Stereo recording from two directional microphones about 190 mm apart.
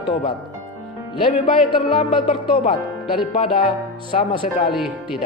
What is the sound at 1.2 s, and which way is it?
Speech, 25° left (ahead or behind).